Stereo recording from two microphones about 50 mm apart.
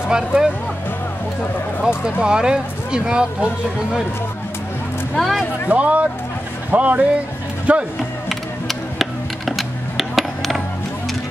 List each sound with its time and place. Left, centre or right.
0.1 s speech: centre
2.2 s speech: centre
5.1 s speech: centre
5.7 s speech: right
8.3 s mechanisms: centre
9.5 s music: centre